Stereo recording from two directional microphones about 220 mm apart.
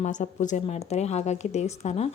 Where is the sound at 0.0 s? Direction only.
35° left (ahead or behind).